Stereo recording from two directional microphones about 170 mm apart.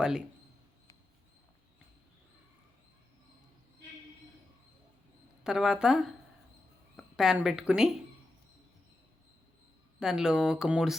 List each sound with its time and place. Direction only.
5.4 s speech: 5° right (ahead or behind)
10.0 s speech: 5° right (ahead or behind)